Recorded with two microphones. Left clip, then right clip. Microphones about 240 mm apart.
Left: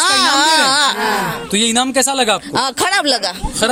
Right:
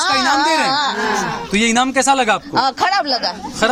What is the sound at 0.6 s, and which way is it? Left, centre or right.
Speech, left.